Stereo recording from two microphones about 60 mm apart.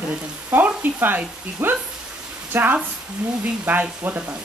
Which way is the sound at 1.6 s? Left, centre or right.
Right.